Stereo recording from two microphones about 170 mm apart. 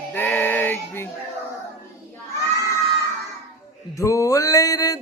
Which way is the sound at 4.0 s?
20° left (ahead or behind).